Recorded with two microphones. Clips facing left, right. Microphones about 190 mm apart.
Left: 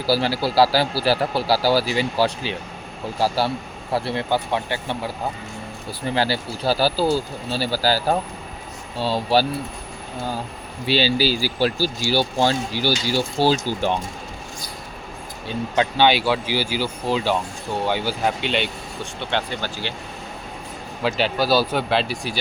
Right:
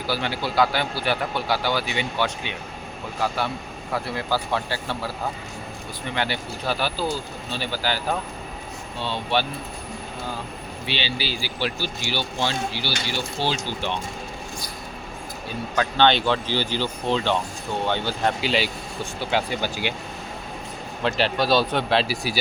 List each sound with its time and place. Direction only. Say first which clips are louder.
0.0 s speech: left 6 dB; 35° left (ahead or behind); by 5.1 s 20° left (ahead or behind)
6.1 s speech: left 5 dB; 35° left (ahead or behind)
10.8 s speech: left 10 dB; 40° left (ahead or behind)
15.4 s speech: left 4 dB; 20° left (ahead or behind)
16.0 s speech: left 1 dB; 10° left (ahead or behind); by 19.9 s 10° right (ahead or behind)
21.0 s speech: left 1 dB; centre (ahead or behind)